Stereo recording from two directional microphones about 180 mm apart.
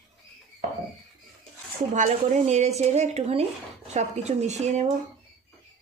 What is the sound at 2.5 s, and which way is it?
Speech, 40° right (ahead or behind).